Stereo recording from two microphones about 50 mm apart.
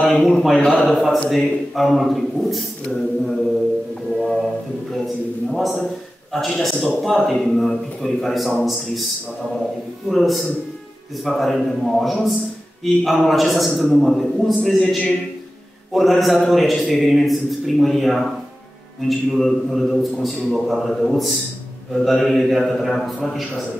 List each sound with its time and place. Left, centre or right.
0.0 s a man's voice: centre
4.9 s a man's voice: centre
7.1 s a man's voice: centre
10.0 s a man's voice: centre